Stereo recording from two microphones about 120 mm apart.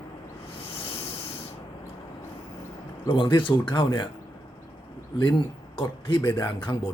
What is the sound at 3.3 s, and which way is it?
Speech, 45° left (ahead or behind).